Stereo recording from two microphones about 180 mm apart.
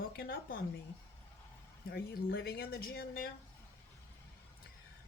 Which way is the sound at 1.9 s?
60° left (ahead or behind).